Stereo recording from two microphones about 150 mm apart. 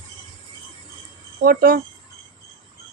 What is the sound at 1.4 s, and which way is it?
Speech, 75° right (ahead or behind).